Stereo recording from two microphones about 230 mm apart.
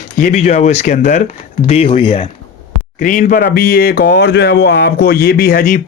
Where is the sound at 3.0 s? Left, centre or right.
Left.